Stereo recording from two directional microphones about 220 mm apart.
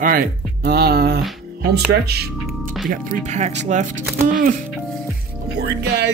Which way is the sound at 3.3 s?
30° right (ahead or behind).